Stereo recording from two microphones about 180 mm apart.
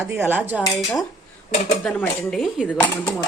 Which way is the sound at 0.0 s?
15° right (ahead or behind).